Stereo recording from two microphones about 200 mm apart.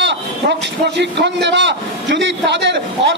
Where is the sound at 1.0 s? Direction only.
60° right (ahead or behind).